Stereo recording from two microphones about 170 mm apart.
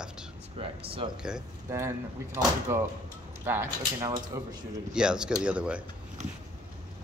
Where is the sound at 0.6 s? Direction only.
30° right (ahead or behind).